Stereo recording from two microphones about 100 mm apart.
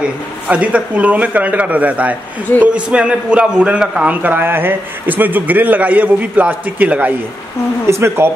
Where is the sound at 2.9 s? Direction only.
10° right (ahead or behind); by 8.2 s 25° right (ahead or behind).